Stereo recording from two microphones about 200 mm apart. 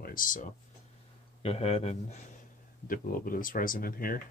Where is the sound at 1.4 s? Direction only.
30° left (ahead or behind).